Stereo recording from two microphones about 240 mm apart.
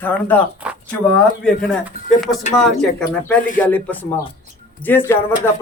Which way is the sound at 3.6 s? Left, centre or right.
Centre.